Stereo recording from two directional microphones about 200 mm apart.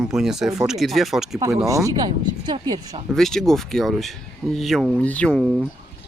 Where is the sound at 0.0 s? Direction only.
Centre (ahead or behind).